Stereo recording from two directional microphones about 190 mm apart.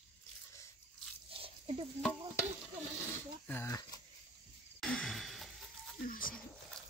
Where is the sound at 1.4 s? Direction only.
30° right (ahead or behind).